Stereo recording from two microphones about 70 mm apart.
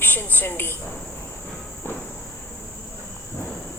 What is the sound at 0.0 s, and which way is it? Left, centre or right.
Speech, left.